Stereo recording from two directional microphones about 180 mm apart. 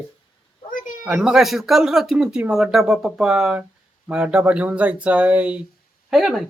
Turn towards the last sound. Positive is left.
turn(degrees=0)  # may be behind; listen again after turning